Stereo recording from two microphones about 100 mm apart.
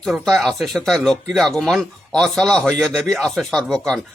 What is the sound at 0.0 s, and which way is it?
Speech, centre (ahead or behind).